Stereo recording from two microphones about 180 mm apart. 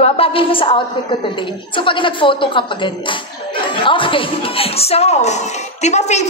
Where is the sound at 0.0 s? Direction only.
35° left (ahead or behind).